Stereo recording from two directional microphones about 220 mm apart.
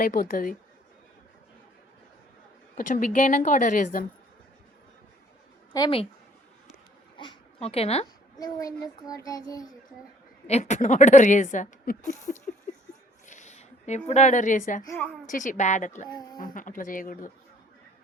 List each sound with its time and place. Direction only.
0.0 s a woman's voice: 40° left (ahead or behind)
2.7 s a woman's voice: 40° left (ahead or behind)
5.7 s speech: 20° left (ahead or behind)
7.2 s speech: 25° left (ahead or behind)
8.4 s a child's voice: 15° left (ahead or behind)
10.4 s a woman's voice: 30° left (ahead or behind)
13.2 s a sound: 35° left (ahead or behind)
14.1 s a woman's voice: 30° left (ahead or behind)
16.0 s a child's voice: 20° left (ahead or behind)
16.4 s a woman's voice: 40° left (ahead or behind)